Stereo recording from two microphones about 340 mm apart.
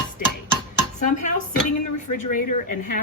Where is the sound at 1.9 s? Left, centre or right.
Left.